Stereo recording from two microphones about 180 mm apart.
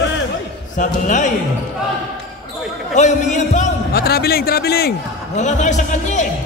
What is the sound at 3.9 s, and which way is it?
A man's voice, 60° left (ahead or behind).